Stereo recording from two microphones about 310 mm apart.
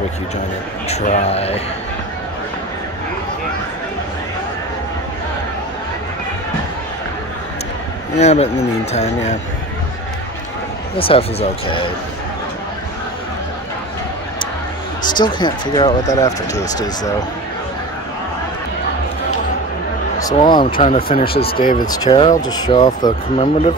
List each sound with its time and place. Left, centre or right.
0.8 s speech: left
8.2 s speech: left
11.0 s speech: centre
15.3 s speech: centre
20.2 s speech: centre
21.8 s speech: centre